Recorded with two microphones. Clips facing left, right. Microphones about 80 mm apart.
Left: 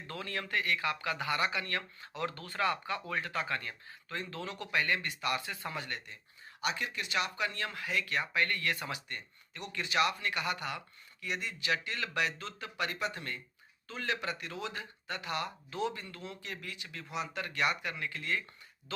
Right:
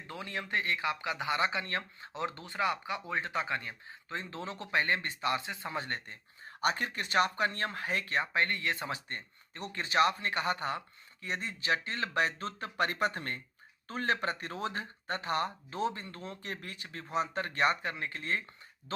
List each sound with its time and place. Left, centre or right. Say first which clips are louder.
0.1 s speech: right 1 dB; centre; by 19.1 s right